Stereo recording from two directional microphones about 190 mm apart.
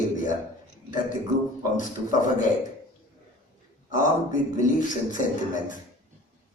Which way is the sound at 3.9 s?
45° left (ahead or behind).